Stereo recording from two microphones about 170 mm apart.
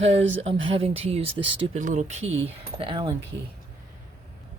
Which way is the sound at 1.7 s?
45° right (ahead or behind).